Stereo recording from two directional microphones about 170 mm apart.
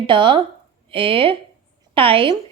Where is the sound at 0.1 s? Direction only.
30° right (ahead or behind).